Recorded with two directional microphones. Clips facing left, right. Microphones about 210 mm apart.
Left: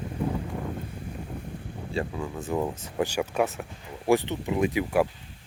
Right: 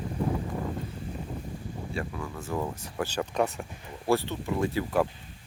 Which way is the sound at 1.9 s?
20° left (ahead or behind).